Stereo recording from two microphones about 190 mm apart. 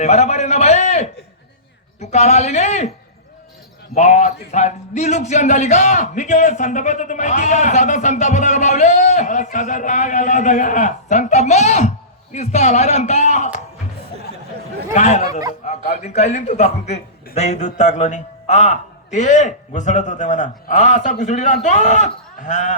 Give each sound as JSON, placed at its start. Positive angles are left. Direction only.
{"t": 0.0, "sound": "a sound", "side_deg": 35}
{"t": 2.0, "sound": "a man's voice", "side_deg": 35}
{"t": 3.9, "sound": "a man's voice", "side_deg": 35}
{"t": 14.9, "sound": "a man's voice", "side_deg": 35}